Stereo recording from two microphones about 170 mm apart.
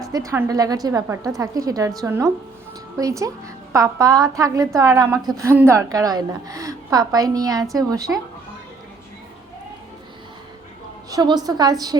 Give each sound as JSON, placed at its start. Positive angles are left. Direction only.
{"t": 0.0, "sound": "a woman's voice", "side_deg": -20}
{"t": 11.1, "sound": "a woman's voice", "side_deg": -25}